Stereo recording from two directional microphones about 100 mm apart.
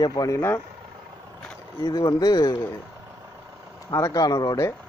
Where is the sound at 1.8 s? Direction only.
45° left (ahead or behind).